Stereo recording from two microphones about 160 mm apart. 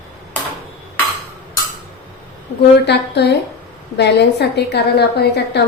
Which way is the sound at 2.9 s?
90° left.